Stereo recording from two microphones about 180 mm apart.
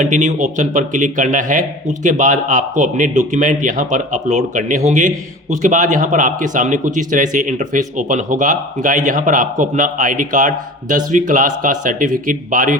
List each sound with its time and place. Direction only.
0.0 s speech: 45° right (ahead or behind)